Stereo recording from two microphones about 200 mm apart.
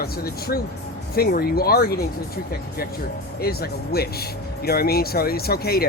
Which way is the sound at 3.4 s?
50° left (ahead or behind).